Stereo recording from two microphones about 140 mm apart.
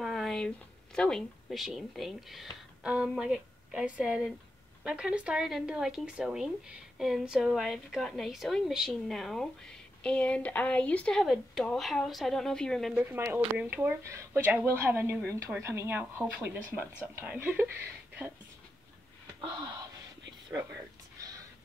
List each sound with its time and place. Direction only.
0.0 s a sound: centre (ahead or behind)
0.9 s a woman's voice: 5° left (ahead or behind)
12.9 s a woman's voice: 15° right (ahead or behind)